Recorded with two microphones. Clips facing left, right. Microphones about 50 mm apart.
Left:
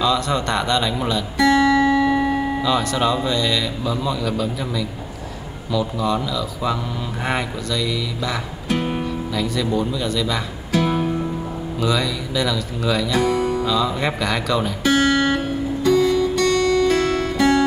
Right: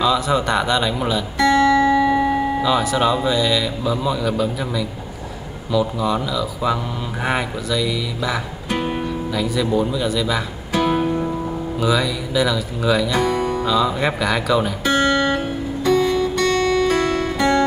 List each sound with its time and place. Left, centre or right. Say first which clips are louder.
0.0 s speech: right 2 dB; centre
7.2 s music: right 2 dB; centre
11.8 s speech: right 2 dB; centre
15.1 s music: even; centre
15.8 s music: even; centre
16.8 s guitar: even; centre